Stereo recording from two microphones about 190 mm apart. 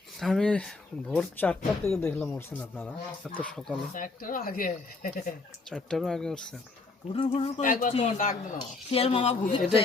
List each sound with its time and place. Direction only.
0.2 s speech: 5° left (ahead or behind)
3.9 s speech: 45° left (ahead or behind)
5.6 s speech: 5° left (ahead or behind)
7.1 s speech: 30° left (ahead or behind)